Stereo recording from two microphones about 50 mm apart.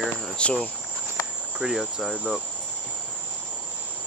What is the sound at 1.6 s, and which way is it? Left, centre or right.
Cricket, centre.